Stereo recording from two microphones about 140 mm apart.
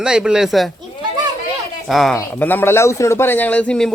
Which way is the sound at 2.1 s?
15° left (ahead or behind).